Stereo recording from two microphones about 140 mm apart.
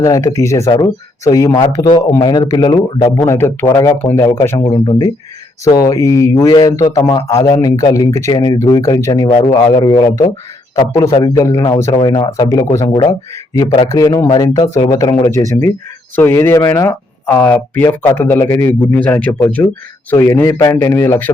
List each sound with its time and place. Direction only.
0.0 s a man's voice: 25° left (ahead or behind)
4.7 s speech: 35° left (ahead or behind)
5.6 s a man's voice: 25° left (ahead or behind)